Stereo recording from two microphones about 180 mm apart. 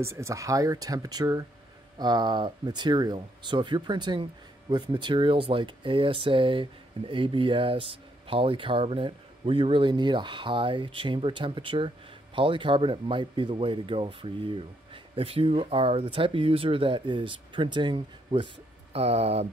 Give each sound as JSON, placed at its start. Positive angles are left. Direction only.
{"t": 0.0, "sound": "speech", "side_deg": -15}